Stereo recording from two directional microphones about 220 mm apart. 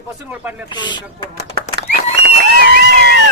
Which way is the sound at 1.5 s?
45° right (ahead or behind).